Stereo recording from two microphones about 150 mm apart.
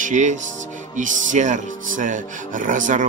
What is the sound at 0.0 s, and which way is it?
Speech, 55° right (ahead or behind).